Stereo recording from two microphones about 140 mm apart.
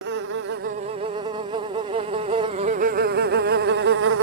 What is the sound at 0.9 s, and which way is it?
Insect, 45° right (ahead or behind).